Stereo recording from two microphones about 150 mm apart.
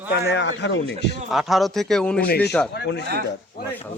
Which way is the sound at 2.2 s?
90° left.